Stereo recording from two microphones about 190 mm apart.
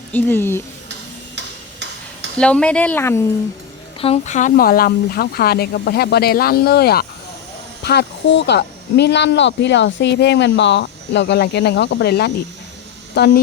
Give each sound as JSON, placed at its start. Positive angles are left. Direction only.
{"t": 0.1, "sound": "speech", "side_deg": 10}
{"t": 2.4, "sound": "speech", "side_deg": 5}
{"t": 4.0, "sound": "speech", "side_deg": 35}